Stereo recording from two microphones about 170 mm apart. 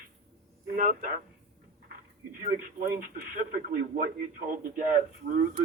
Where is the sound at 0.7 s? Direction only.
55° right (ahead or behind).